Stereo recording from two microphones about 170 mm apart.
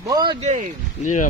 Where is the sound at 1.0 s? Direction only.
45° left (ahead or behind).